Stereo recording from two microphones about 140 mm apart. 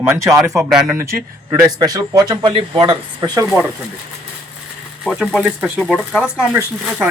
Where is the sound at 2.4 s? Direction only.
40° right (ahead or behind).